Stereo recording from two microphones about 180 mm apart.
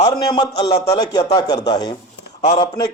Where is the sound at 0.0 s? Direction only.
25° left (ahead or behind).